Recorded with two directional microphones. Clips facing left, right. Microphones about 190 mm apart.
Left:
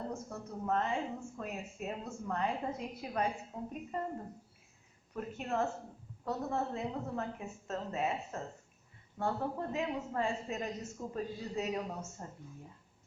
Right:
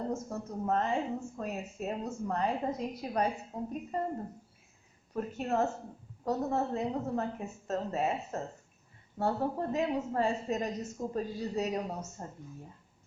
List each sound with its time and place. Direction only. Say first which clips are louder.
0.1 s a woman's voice: right 6 dB; 40° right (ahead or behind)
5.1 s a woman's voice: right 4 dB; 40° right (ahead or behind)